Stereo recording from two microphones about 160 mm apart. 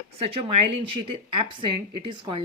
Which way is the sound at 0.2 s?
35° right (ahead or behind).